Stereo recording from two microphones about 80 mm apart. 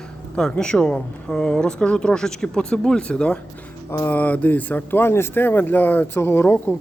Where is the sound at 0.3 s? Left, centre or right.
Centre.